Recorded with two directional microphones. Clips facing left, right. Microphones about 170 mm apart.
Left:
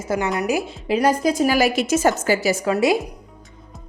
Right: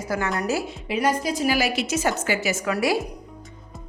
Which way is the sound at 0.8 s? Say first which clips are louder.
Left 6 dB; 40° left (ahead or behind).